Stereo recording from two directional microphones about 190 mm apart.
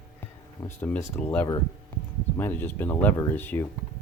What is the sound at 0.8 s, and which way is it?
Speech, 10° left (ahead or behind).